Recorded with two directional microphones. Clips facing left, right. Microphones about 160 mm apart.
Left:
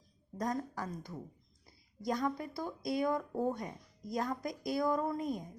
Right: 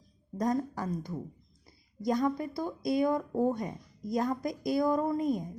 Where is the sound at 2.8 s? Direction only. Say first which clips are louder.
Right 5 dB; 20° right (ahead or behind).